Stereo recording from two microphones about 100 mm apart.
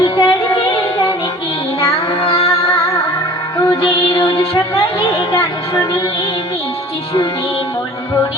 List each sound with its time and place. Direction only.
0.0 s child singing: 65° left (ahead or behind)
3.8 s music: 65° left (ahead or behind)